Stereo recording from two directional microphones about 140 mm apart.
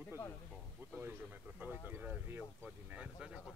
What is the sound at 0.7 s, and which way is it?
Speech, 10° right (ahead or behind).